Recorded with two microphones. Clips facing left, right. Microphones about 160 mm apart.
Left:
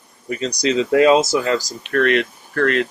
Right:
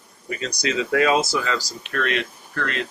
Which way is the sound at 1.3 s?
40° left (ahead or behind).